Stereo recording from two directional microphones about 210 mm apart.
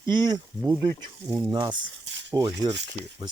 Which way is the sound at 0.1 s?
20° right (ahead or behind).